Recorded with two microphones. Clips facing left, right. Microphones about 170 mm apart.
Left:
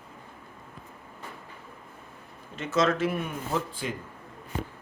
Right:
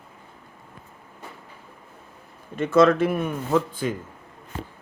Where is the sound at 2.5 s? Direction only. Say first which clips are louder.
Right 8 dB; 55° right (ahead or behind).